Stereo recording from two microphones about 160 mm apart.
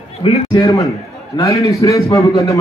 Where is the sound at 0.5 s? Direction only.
20° left (ahead or behind).